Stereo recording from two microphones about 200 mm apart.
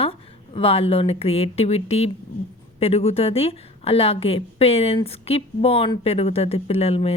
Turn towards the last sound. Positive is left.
turn(degrees=30)  # may be behind; listen again after turning